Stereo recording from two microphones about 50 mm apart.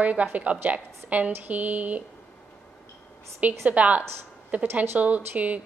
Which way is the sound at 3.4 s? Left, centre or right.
Right.